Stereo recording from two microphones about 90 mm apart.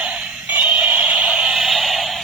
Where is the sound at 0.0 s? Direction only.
10° right (ahead or behind).